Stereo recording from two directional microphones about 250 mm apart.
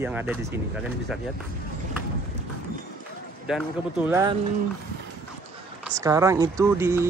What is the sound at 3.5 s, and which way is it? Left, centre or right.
Speech, centre.